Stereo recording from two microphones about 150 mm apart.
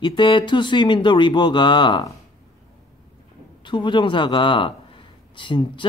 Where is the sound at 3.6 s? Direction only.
30° left (ahead or behind).